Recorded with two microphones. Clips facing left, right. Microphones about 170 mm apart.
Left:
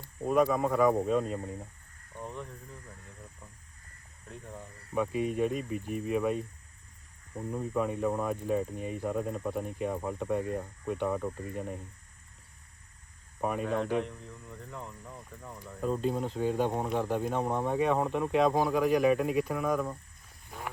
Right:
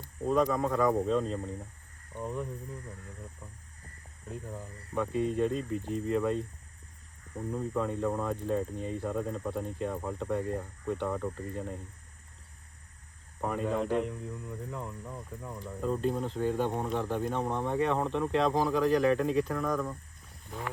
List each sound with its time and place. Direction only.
0.3 s speech: 10° left (ahead or behind)
2.1 s speech: 10° right (ahead or behind)
4.3 s speech: centre (ahead or behind)
4.9 s speech: 15° left (ahead or behind)
7.5 s speech: 10° left (ahead or behind)
13.4 s speech: 15° left (ahead or behind)
14.0 s speech: 5° right (ahead or behind)
15.8 s speech: 15° left (ahead or behind)